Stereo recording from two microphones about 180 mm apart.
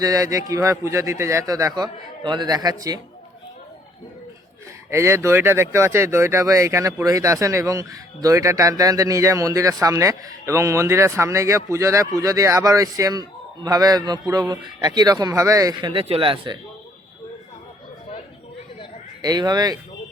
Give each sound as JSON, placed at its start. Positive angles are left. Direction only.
{"t": 0.0, "sound": "a man's voice", "side_deg": -20}
{"t": 4.9, "sound": "a man's voice", "side_deg": -15}
{"t": 19.2, "sound": "a man's voice", "side_deg": -20}